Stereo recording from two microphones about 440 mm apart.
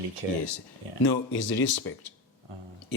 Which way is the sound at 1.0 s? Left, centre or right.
Left.